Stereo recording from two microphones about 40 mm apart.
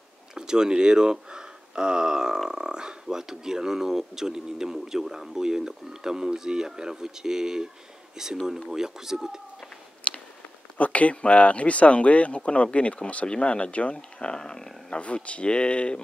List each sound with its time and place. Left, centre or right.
0.3 s speech: centre
10.1 s a sound: left
10.8 s speech: left; by 15.0 s centre
15.0 s speech: left